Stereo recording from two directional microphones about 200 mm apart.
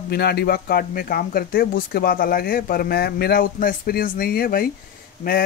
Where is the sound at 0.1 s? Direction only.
55° left (ahead or behind).